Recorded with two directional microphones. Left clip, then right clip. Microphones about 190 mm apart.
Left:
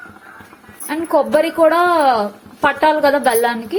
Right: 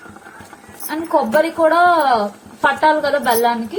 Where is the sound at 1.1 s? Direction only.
30° left (ahead or behind).